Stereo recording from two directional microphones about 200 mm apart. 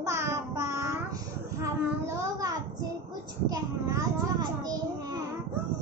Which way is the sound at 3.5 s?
15° right (ahead or behind).